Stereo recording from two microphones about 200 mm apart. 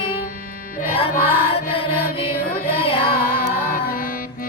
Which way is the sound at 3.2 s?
45° left (ahead or behind).